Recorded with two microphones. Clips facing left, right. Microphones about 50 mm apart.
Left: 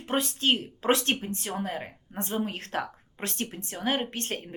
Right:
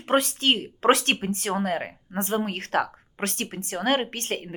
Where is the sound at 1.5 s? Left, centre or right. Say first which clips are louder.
Right 7 dB; right.